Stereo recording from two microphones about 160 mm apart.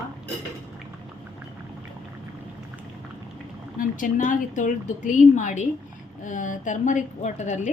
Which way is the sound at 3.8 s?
55° left (ahead or behind).